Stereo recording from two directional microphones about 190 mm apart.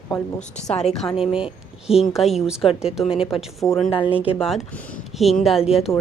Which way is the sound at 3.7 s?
30° left (ahead or behind).